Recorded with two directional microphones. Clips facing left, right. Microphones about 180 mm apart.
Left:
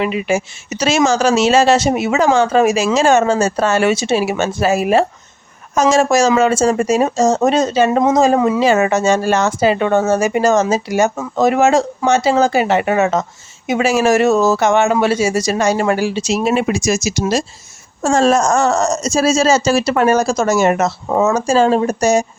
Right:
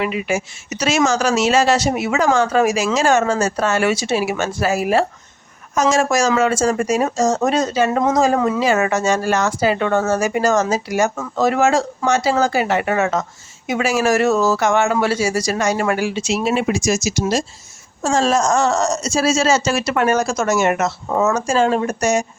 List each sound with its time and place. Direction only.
0.0 s speech: 25° left (ahead or behind); by 17.4 s 70° left (ahead or behind)
18.0 s speech: 55° left (ahead or behind); by 22.3 s 35° left (ahead or behind)